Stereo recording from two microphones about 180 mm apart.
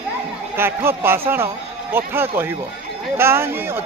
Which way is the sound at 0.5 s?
15° right (ahead or behind).